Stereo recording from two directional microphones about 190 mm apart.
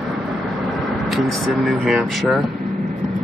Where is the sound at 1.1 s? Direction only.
Centre (ahead or behind).